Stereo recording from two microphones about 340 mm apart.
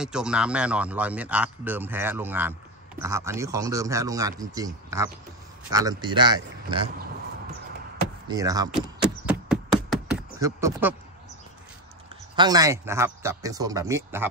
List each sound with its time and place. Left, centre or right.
0.0 s speech: centre
8.3 s speech: centre
9.2 s knock: centre
12.4 s speech: centre